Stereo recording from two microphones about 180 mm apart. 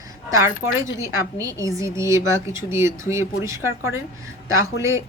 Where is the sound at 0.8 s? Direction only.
20° right (ahead or behind).